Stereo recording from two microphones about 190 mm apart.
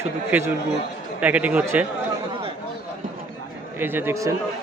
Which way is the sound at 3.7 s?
10° right (ahead or behind).